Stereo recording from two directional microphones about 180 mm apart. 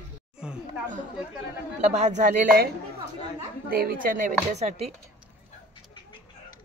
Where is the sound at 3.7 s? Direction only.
55° right (ahead or behind); by 4.9 s 35° right (ahead or behind).